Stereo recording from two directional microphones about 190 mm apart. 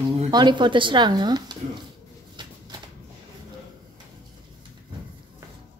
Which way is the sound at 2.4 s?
25° right (ahead or behind).